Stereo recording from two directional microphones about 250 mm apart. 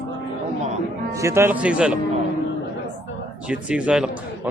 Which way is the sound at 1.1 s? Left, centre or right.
Centre.